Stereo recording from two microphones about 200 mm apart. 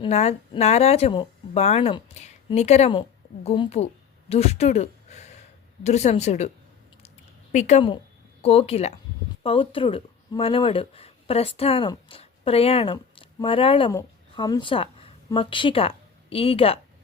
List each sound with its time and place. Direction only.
0.0 s a woman's voice: 35° left (ahead or behind)
7.5 s speech: 35° left (ahead or behind)